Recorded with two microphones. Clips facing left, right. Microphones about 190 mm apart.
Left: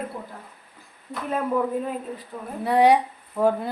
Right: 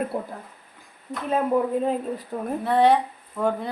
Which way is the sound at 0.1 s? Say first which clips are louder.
Right 7 dB; 50° right (ahead or behind).